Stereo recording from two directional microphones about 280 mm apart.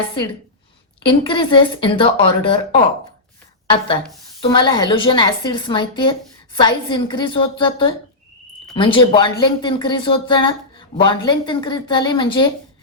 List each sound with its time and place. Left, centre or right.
1.0 s speech: centre
4.4 s speech: centre